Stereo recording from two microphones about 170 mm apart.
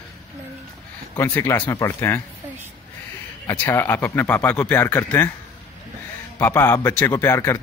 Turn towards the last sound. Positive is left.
turn(degrees=15)  # may be behind; listen again after turning